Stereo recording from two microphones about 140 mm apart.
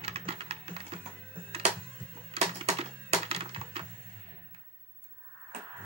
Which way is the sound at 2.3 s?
50° right (ahead or behind).